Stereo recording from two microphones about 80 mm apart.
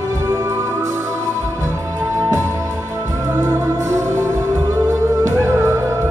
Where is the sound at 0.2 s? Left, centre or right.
Right.